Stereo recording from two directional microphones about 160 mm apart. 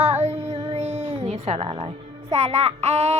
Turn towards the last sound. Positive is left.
turn(degrees=-40)  # may be behind; listen again after turning